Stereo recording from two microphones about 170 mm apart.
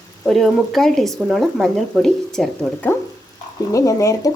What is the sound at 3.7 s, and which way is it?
Speech, 20° left (ahead or behind).